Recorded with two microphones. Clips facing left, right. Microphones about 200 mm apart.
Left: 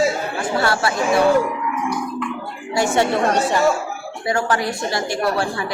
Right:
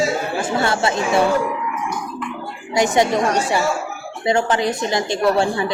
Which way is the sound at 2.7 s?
20° right (ahead or behind).